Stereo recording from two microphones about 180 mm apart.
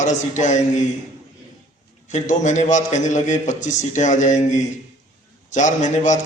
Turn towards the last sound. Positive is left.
turn(degrees=45)  # may be behind; listen again after turning